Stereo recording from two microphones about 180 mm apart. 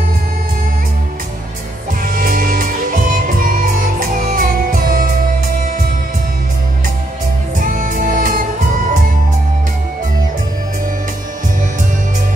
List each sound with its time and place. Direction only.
2.0 s music: 50° right (ahead or behind)
7.5 s music: 50° right (ahead or behind)